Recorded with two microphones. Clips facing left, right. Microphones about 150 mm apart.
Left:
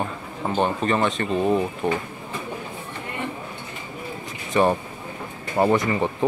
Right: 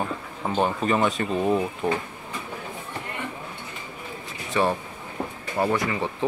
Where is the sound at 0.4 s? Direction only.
Centre (ahead or behind).